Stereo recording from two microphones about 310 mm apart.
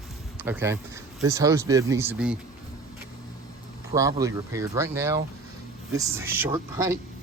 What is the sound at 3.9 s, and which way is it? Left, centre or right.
Speech, centre.